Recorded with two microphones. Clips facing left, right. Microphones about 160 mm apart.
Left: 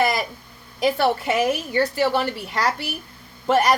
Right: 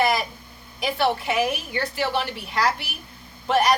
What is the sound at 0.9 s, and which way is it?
A woman's voice, 40° left (ahead or behind).